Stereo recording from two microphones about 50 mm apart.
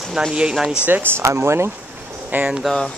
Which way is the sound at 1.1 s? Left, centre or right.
Right.